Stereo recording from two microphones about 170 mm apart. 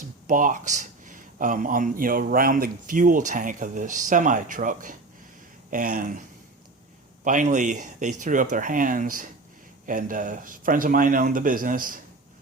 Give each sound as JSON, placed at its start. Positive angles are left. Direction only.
{"t": 0.3, "sound": "speech", "side_deg": -50}
{"t": 7.3, "sound": "speech", "side_deg": -50}